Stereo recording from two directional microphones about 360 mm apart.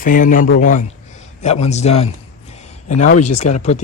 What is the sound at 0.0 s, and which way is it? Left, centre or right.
Speech, left.